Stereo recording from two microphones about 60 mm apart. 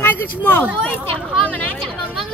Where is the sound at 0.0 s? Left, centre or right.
Left.